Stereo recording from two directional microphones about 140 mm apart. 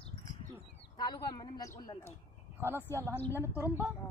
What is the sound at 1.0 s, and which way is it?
Speech, 30° left (ahead or behind).